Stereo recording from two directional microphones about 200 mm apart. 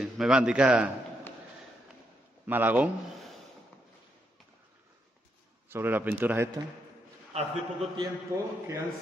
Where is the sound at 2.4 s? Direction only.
10° right (ahead or behind).